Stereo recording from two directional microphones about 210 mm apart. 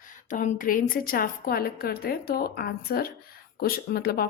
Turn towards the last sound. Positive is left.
turn(degrees=45)  # may be behind; listen again after turning